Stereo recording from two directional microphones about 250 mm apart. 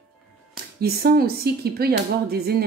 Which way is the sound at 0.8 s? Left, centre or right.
Right.